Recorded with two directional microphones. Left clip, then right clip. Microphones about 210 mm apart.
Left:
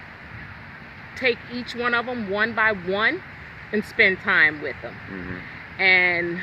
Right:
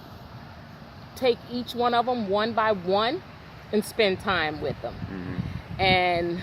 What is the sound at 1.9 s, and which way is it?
Speech, 20° left (ahead or behind).